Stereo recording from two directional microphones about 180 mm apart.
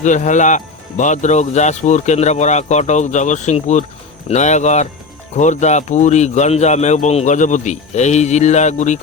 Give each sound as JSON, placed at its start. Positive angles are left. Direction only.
{"t": 0.0, "sound": "speech", "side_deg": 40}